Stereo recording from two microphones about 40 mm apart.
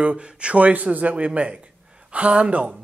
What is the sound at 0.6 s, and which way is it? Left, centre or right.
Speech, right.